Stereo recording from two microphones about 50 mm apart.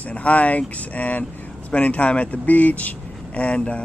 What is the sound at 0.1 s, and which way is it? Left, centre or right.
Speech, left.